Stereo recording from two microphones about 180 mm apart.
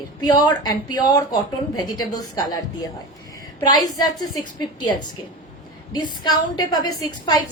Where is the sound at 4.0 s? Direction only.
25° left (ahead or behind).